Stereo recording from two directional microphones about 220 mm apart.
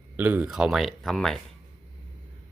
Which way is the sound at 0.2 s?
5° right (ahead or behind).